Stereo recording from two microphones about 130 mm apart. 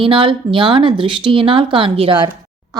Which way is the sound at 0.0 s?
40° right (ahead or behind).